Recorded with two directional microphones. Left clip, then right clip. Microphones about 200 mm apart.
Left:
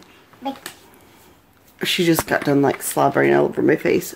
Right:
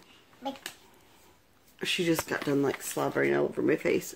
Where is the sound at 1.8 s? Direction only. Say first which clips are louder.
Left 10 dB; 15° left (ahead or behind).